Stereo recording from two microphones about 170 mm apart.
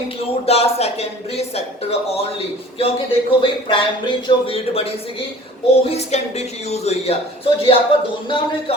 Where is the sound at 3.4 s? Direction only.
30° left (ahead or behind).